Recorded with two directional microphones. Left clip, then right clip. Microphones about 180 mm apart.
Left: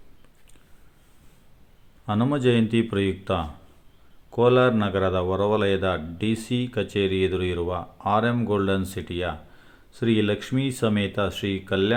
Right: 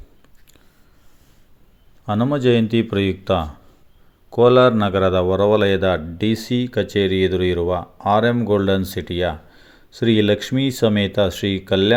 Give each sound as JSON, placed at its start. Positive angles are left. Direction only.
{"t": 2.0, "sound": "a man's voice", "side_deg": -20}